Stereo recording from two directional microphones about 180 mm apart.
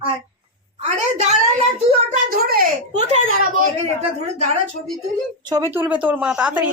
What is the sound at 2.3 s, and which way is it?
Speech, 55° right (ahead or behind).